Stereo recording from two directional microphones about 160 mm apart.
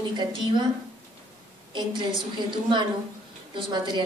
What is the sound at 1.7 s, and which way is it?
A woman's voice, 30° right (ahead or behind).